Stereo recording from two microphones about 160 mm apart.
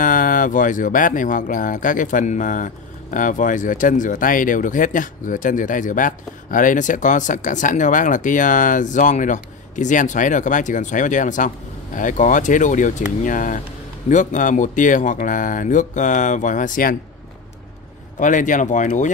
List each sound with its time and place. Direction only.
0.0 s speech: 60° left (ahead or behind)
18.2 s speech: 55° left (ahead or behind)